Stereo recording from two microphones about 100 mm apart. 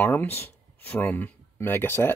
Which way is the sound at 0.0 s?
20° left (ahead or behind).